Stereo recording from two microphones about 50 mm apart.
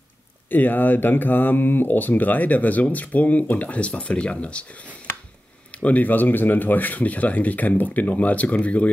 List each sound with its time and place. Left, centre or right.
0.5 s speech: left
5.8 s speech: left